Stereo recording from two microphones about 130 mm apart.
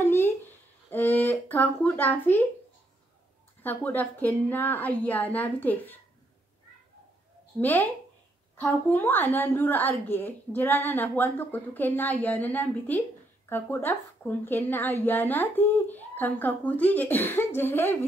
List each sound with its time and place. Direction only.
0.0 s a sound: 15° left (ahead or behind)
3.6 s a woman's voice: 15° left (ahead or behind)
7.6 s a woman's voice: 15° left (ahead or behind)